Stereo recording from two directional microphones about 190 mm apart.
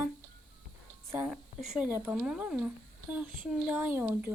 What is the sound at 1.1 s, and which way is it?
A woman's voice, 5° right (ahead or behind).